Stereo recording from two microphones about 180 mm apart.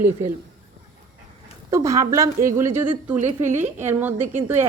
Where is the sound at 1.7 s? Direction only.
20° right (ahead or behind).